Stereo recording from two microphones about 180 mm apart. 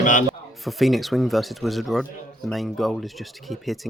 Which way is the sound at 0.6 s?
Centre (ahead or behind).